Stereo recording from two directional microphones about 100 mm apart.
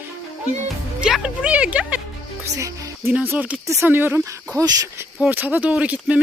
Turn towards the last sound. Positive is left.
turn(degrees=-15)  # may be behind; listen again after turning